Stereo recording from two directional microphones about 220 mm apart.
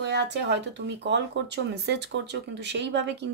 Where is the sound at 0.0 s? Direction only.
50° right (ahead or behind).